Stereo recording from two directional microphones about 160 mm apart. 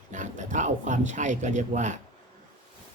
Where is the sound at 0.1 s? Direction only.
50° right (ahead or behind).